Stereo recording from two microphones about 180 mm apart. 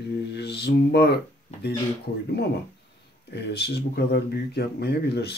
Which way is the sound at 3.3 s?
65° left (ahead or behind).